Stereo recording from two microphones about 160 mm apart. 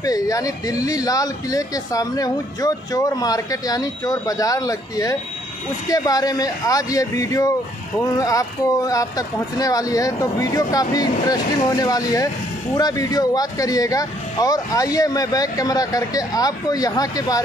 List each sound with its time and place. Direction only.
0.0 s speech: 20° left (ahead or behind)